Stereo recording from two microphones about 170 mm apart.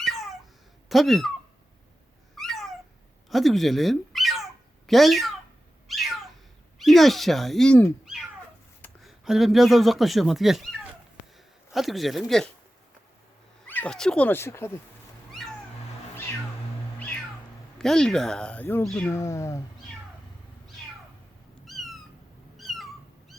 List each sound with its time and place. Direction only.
0.0 s cat: centre (ahead or behind)
0.9 s speech: centre (ahead or behind)
2.3 s cat: centre (ahead or behind)
3.2 s speech: centre (ahead or behind)
5.9 s cat: centre (ahead or behind)
6.7 s speech: centre (ahead or behind)
13.7 s speech: 10° left (ahead or behind)
15.3 s cat: centre (ahead or behind)
17.7 s speech: 5° left (ahead or behind)
21.7 s cat: centre (ahead or behind)